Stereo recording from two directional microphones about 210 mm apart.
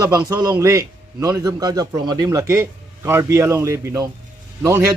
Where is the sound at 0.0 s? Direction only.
15° right (ahead or behind).